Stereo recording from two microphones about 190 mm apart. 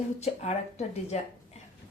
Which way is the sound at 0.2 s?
35° left (ahead or behind).